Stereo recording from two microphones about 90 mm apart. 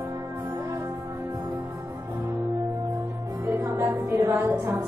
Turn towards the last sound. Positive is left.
turn(degrees=-30)  # may be behind; listen again after turning